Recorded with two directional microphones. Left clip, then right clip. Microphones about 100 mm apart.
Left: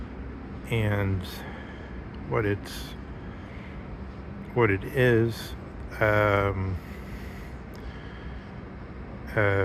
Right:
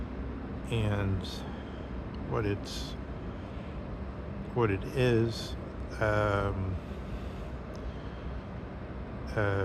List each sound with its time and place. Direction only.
0.7 s speech: 35° left (ahead or behind)
2.3 s speech: 30° left (ahead or behind)
4.5 s speech: 30° left (ahead or behind)
9.3 s speech: 35° left (ahead or behind)